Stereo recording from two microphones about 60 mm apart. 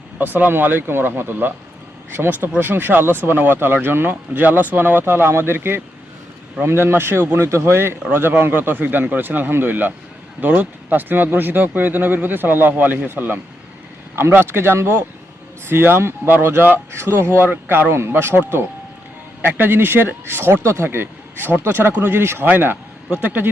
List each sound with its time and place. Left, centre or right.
0.2 s speech: right